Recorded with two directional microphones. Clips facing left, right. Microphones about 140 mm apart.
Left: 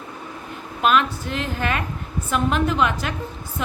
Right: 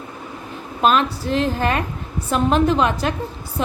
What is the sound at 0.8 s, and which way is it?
A woman's voice, 35° right (ahead or behind).